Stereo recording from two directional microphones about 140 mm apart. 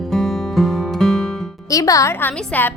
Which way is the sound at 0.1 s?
Centre (ahead or behind).